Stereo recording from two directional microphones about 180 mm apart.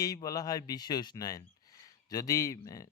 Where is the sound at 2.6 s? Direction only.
20° left (ahead or behind).